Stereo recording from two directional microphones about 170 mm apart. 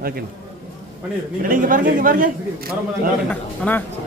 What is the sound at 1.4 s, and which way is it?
Speech, 55° right (ahead or behind).